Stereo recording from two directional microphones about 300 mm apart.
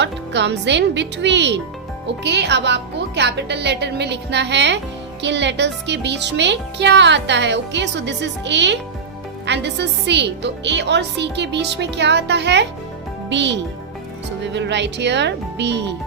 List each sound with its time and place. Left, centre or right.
0.0 s speech: right